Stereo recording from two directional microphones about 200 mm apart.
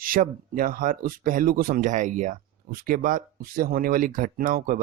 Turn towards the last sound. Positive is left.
turn(degrees=-45)  # may be behind; listen again after turning